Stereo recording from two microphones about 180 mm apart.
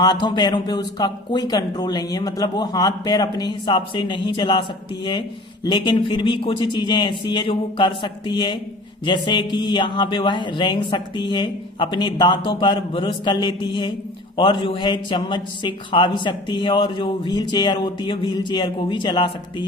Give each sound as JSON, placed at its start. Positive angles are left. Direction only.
{"t": 0.0, "sound": "a man's voice", "side_deg": 25}
{"t": 5.6, "sound": "a man's voice", "side_deg": 25}